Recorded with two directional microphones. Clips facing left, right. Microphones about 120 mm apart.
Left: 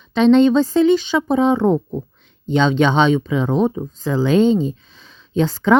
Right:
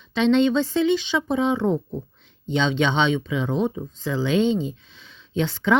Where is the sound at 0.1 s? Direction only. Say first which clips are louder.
Left 6 dB; 40° left (ahead or behind).